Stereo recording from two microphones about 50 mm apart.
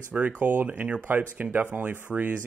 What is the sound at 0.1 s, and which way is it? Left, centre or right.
Speech, right.